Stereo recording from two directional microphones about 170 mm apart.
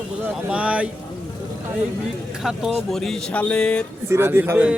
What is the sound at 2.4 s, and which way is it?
Speech, 5° right (ahead or behind).